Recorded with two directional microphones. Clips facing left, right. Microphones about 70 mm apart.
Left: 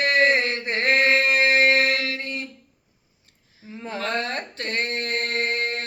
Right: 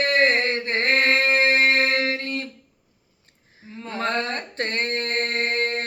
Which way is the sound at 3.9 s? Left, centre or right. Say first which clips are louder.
Right 2 dB; right.